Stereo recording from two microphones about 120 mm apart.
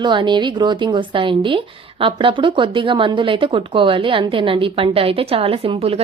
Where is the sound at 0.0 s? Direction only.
40° right (ahead or behind).